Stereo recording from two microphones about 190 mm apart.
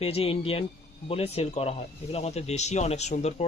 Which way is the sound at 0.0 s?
30° left (ahead or behind).